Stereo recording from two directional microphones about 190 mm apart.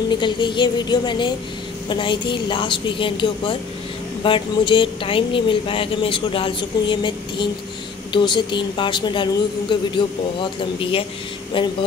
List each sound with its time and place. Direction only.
0.1 s speech: 25° left (ahead or behind)